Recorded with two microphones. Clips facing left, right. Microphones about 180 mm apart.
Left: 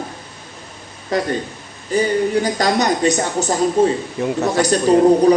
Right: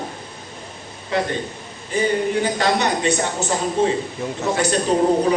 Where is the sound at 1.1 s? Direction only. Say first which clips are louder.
Left 2 dB; 40° left (ahead or behind).